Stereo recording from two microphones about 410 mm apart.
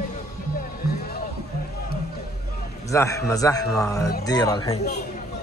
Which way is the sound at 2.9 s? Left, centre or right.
Centre.